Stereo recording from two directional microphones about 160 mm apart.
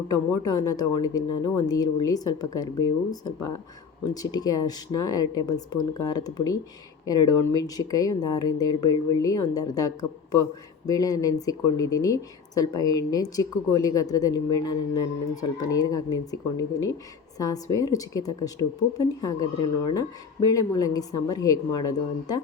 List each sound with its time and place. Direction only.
0.1 s speech: 20° left (ahead or behind)